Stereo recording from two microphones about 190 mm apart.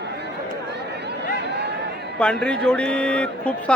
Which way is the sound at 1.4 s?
65° right (ahead or behind).